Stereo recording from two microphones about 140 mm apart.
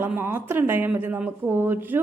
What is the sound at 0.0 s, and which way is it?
Speech, 15° right (ahead or behind).